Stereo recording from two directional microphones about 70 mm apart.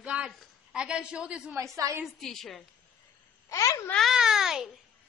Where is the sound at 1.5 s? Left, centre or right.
Right.